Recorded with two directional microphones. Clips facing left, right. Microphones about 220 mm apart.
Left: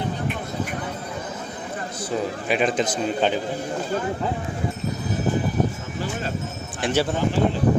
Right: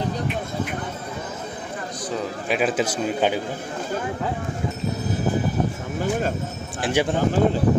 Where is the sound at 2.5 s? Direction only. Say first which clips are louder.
Even; 5° right (ahead or behind).